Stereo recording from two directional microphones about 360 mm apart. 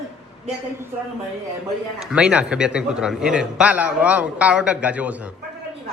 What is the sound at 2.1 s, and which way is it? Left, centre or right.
A man's voice, centre.